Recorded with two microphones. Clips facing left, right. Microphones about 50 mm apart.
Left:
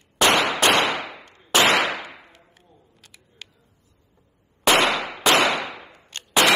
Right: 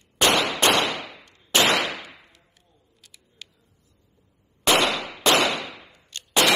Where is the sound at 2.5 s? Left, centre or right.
Left.